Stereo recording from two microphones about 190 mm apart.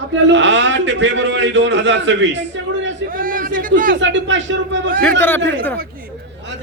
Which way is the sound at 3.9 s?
75° right (ahead or behind).